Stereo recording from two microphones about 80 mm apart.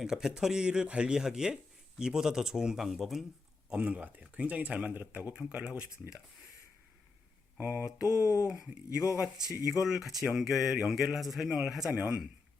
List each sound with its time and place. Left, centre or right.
0.0 s speech: centre
3.7 s speech: centre
7.6 s a sound: right
8.4 s speech: centre